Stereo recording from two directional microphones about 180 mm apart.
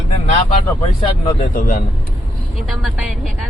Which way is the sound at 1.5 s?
55° left (ahead or behind).